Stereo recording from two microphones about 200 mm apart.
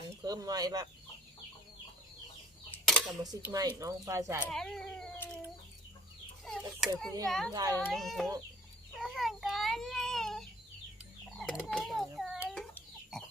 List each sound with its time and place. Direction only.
0.2 s speech: 20° right (ahead or behind)
2.7 s a sound: centre (ahead or behind)
3.8 s speech: 15° right (ahead or behind)
4.4 s speech: 5° left (ahead or behind)
6.4 s chicken: centre (ahead or behind)
7.3 s speech: centre (ahead or behind)
7.5 s speech: 15° right (ahead or behind)
7.8 s speech: centre (ahead or behind)
9.0 s a sound: centre (ahead or behind)
11.3 s a child's voice: centre (ahead or behind)
12.5 s chicken: centre (ahead or behind)